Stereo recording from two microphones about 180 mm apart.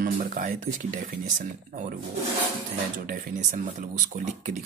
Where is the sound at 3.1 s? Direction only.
50° right (ahead or behind).